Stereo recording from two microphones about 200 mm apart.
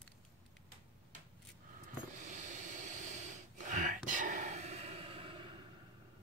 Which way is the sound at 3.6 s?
40° right (ahead or behind).